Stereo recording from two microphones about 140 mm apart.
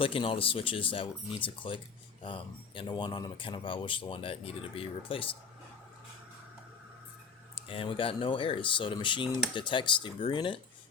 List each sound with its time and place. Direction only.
0.0 s speech: 40° left (ahead or behind)
7.7 s speech: 40° left (ahead or behind)